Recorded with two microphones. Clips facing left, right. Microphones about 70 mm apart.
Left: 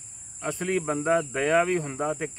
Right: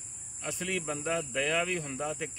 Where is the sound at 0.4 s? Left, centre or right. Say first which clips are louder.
Left 7 dB; left.